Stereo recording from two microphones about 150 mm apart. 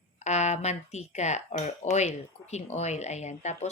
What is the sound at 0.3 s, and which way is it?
Speech, 50° left (ahead or behind).